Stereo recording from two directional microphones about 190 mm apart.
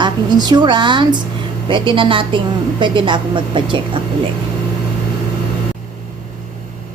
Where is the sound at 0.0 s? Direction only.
20° right (ahead or behind).